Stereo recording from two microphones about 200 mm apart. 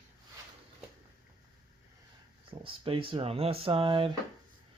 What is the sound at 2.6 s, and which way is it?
Speech, 25° right (ahead or behind).